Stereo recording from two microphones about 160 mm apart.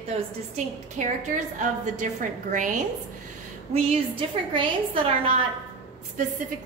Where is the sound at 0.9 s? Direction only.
50° right (ahead or behind).